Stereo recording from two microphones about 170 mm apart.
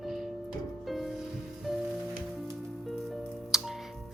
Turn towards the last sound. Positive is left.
turn(degrees=0)  # may be behind; listen again after turning